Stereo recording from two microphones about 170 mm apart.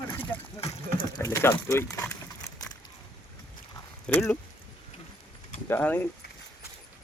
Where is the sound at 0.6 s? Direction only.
20° left (ahead or behind).